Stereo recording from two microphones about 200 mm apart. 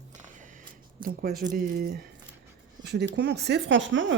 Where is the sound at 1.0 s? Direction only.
50° right (ahead or behind).